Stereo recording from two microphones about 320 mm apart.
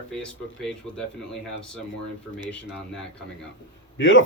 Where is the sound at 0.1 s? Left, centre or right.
Centre.